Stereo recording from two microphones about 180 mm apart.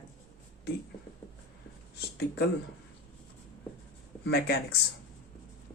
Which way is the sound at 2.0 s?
65° left (ahead or behind).